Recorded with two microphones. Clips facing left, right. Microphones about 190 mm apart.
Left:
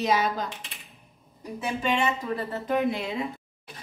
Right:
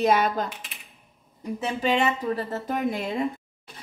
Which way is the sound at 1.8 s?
35° right (ahead or behind).